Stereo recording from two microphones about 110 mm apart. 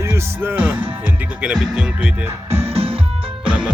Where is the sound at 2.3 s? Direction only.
25° right (ahead or behind).